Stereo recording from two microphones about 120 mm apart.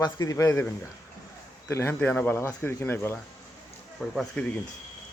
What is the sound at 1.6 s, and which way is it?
A man's voice, 20° left (ahead or behind).